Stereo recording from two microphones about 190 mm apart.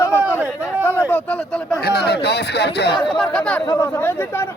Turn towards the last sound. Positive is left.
turn(degrees=10)  # may be behind; listen again after turning